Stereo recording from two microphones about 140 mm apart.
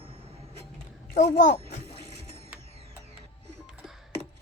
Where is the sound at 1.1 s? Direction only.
60° left (ahead or behind).